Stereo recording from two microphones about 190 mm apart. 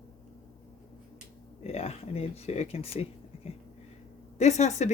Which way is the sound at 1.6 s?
35° left (ahead or behind).